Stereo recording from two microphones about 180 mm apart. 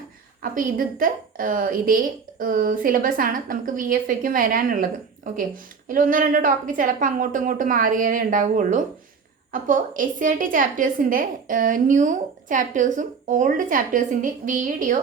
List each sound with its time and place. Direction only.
0.5 s a woman's voice: 50° right (ahead or behind)